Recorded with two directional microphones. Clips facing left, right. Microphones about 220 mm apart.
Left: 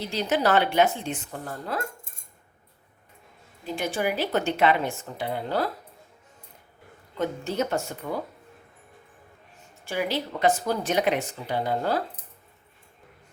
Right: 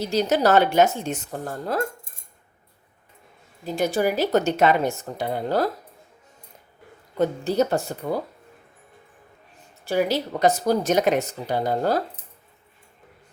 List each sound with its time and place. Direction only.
0.0 s speech: 40° right (ahead or behind)
3.8 s speech: 40° right (ahead or behind)
7.2 s speech: 35° right (ahead or behind)
9.8 s speech: 40° right (ahead or behind)